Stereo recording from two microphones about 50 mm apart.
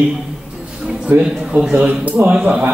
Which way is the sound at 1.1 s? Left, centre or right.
Right.